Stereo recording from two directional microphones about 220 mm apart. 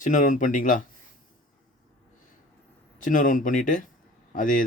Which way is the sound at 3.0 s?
35° left (ahead or behind).